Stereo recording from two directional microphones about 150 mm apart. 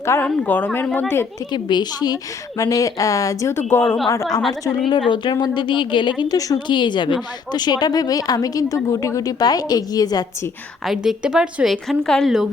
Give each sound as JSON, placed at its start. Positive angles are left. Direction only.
{"t": 0.0, "sound": "a woman's voice", "side_deg": 15}
{"t": 1.5, "sound": "speech", "side_deg": 30}
{"t": 10.8, "sound": "speech", "side_deg": -5}